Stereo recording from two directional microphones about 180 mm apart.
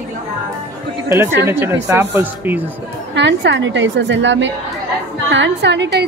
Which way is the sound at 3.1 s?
80° right.